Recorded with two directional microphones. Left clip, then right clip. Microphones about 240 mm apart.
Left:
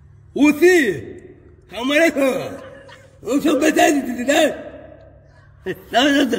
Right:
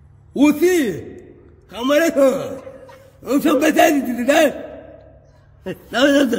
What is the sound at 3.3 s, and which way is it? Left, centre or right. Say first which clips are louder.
A man's voice: right 1 dB; right.